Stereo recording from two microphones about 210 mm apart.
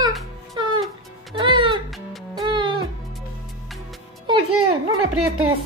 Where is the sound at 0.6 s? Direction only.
20° right (ahead or behind).